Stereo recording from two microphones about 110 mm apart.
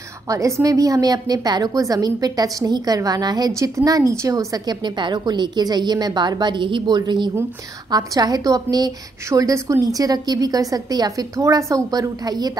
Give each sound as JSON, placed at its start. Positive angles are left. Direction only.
{"t": 0.3, "sound": "a woman's voice", "side_deg": -30}